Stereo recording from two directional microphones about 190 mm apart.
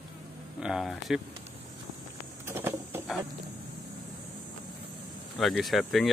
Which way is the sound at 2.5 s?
15° right (ahead or behind).